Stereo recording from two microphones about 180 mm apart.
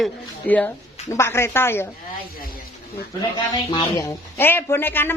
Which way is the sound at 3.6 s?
15° left (ahead or behind).